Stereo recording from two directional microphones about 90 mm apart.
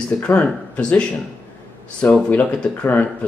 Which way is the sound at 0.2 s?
15° left (ahead or behind).